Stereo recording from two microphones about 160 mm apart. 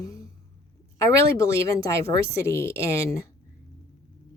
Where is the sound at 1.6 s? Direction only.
20° left (ahead or behind).